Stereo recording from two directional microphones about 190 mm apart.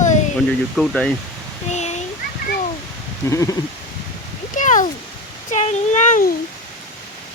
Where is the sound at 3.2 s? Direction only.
15° left (ahead or behind).